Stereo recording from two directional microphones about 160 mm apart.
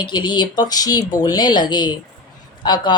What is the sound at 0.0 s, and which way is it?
Speech, 30° left (ahead or behind).